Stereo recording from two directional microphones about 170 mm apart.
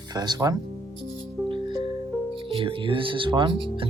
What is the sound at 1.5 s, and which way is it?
Music, 30° right (ahead or behind).